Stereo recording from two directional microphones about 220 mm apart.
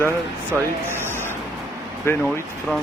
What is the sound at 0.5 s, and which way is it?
Speech, 10° right (ahead or behind).